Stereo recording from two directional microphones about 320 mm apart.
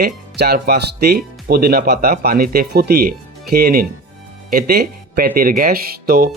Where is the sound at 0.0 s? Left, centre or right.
Right.